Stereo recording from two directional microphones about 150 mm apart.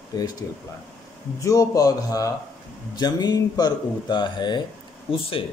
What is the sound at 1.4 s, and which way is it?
A man's voice, 25° left (ahead or behind).